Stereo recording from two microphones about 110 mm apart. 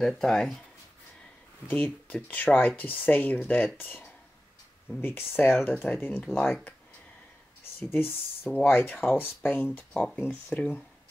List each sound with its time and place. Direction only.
0.0 s speech: 5° left (ahead or behind)
1.7 s speech: 15° left (ahead or behind)
7.9 s speech: 15° left (ahead or behind)
9.9 s speech: 5° left (ahead or behind)